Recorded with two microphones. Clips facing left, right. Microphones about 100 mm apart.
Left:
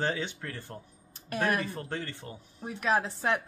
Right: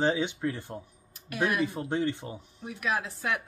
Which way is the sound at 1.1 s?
40° left (ahead or behind).